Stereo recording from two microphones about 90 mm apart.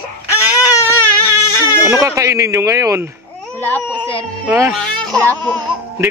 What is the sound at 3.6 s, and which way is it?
Speech, 20° left (ahead or behind).